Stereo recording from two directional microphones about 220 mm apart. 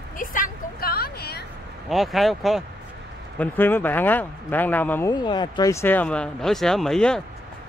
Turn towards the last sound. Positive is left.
turn(degrees=0)  # may be behind; listen again after turning